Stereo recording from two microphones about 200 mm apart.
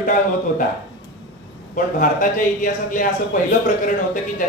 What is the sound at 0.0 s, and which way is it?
Speech, 40° left (ahead or behind).